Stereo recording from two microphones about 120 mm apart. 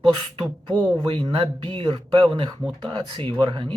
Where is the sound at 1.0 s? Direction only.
50° right (ahead or behind).